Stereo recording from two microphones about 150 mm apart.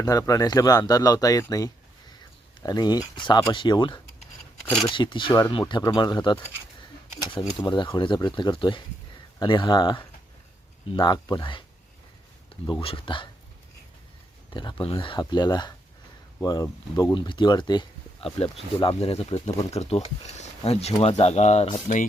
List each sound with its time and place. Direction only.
0.0 s speech: 25° left (ahead or behind)
12.8 s speech: 35° left (ahead or behind)
14.5 s speech: 30° left (ahead or behind)
17.2 s speech: 30° left (ahead or behind); by 22.0 s 50° left (ahead or behind)